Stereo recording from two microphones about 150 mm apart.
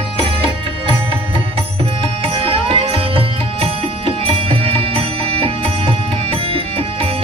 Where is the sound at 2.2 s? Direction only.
40° right (ahead or behind).